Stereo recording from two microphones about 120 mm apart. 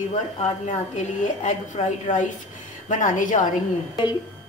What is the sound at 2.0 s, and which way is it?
A woman's voice, 90° left.